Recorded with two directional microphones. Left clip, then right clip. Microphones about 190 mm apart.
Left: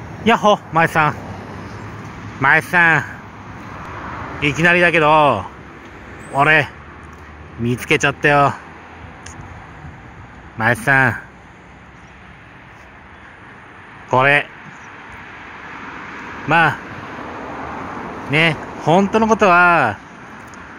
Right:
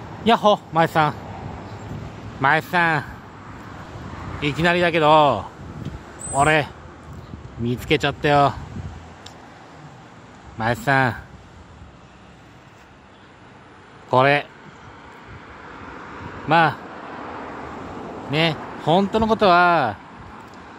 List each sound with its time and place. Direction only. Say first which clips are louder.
0.2 s a man's voice: left 3 dB; 5° right (ahead or behind)
2.4 s speech: left 5 dB; centre (ahead or behind)
4.4 s speech: left 6 dB; centre (ahead or behind)
7.7 s speech: left 5 dB; 5° right (ahead or behind)
10.6 s speech: left 5 dB; centre (ahead or behind)
14.1 s speech: left 3 dB; centre (ahead or behind)
15.8 s vehicle: left 4 dB; 40° left (ahead or behind)
16.4 s speech: left 3 dB; centre (ahead or behind)
16.9 s a sound: left 3 dB; 60° left (ahead or behind)
17.5 s vehicle: left 6 dB; 40° left (ahead or behind)
18.3 s speech: left 5 dB; centre (ahead or behind)